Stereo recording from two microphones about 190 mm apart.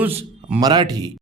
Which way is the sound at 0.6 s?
20° right (ahead or behind).